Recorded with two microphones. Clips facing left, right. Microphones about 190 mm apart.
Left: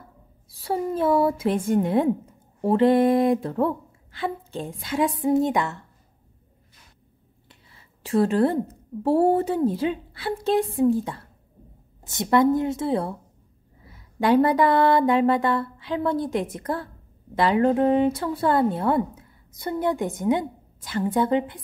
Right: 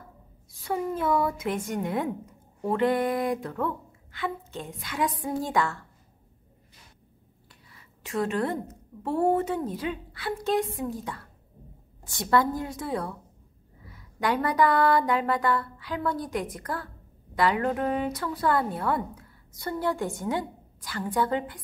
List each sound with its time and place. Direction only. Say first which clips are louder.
0.5 s a woman's voice: left 3 dB; 35° left (ahead or behind)
7.4 s a woman's voice: left 1 dB; 30° left (ahead or behind)